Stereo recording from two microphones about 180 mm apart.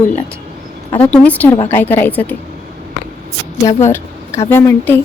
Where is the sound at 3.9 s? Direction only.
15° left (ahead or behind).